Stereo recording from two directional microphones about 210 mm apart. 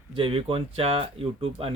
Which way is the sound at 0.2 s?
25° right (ahead or behind).